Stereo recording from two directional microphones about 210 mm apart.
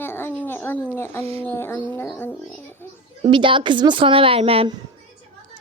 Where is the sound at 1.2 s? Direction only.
30° right (ahead or behind).